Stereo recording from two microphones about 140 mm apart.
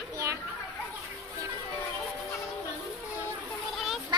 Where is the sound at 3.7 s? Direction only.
Centre (ahead or behind).